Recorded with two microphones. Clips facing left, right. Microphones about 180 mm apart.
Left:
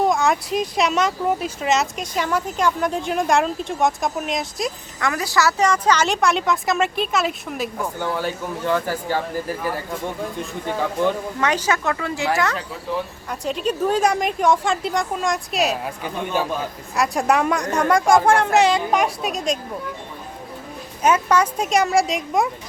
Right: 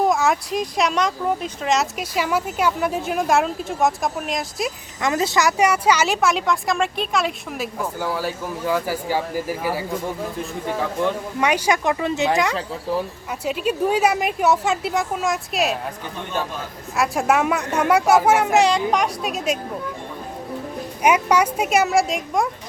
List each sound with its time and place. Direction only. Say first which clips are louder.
0.0 s a woman's voice: even; centre (ahead or behind)
4.9 s a woman's voice: right 2 dB; 20° right (ahead or behind); by 11.1 s centre (ahead or behind)
11.3 s a woman's voice: right 2 dB; 10° right (ahead or behind)
16.9 s a woman's voice: even; centre (ahead or behind)
21.0 s a woman's voice: even; 10° right (ahead or behind)